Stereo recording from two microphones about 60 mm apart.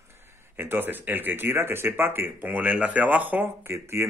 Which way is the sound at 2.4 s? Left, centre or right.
Right.